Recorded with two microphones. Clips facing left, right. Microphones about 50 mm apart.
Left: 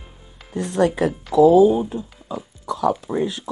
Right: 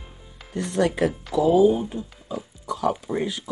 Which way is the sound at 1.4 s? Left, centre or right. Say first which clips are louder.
Left 5 dB; left.